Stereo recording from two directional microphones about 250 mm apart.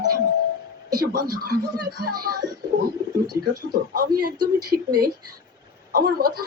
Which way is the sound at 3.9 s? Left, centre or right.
Right.